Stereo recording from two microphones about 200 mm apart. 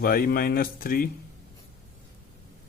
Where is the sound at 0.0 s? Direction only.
50° left (ahead or behind).